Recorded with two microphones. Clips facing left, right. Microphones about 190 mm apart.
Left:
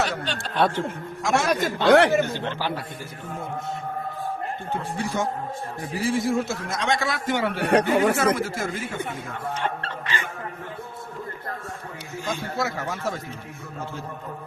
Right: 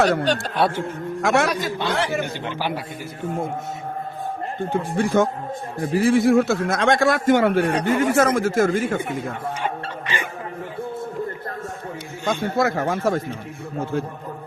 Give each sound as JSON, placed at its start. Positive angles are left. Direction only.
{"t": 0.0, "sound": "speech", "side_deg": -55}
{"t": 0.6, "sound": "speech", "side_deg": -10}
{"t": 1.2, "sound": "a man's voice", "side_deg": -60}
{"t": 1.6, "sound": "speech", "side_deg": 65}
{"t": 2.2, "sound": "speech", "side_deg": -15}
{"t": 4.9, "sound": "speech", "side_deg": -50}
{"t": 7.6, "sound": "speech", "side_deg": 65}
{"t": 8.1, "sound": "speech", "side_deg": -50}
{"t": 9.6, "sound": "speech", "side_deg": -10}
{"t": 12.3, "sound": "speech", "side_deg": -55}